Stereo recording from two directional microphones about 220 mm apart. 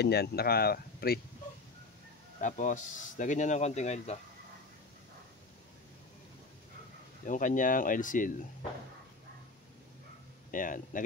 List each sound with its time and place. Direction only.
0.0 s speech: 45° left (ahead or behind)
2.4 s speech: 35° left (ahead or behind)
7.2 s speech: 35° left (ahead or behind)
10.5 s speech: 40° left (ahead or behind)